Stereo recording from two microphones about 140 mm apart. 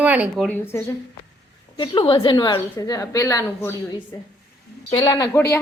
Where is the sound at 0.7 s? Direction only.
15° left (ahead or behind).